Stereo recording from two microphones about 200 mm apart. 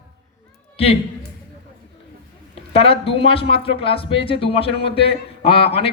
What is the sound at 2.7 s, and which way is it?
A man's voice, 30° left (ahead or behind).